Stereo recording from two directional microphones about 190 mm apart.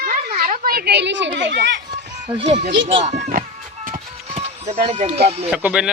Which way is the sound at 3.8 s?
40° right (ahead or behind).